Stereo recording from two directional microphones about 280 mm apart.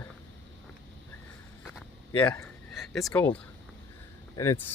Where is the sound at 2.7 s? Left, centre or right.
Centre.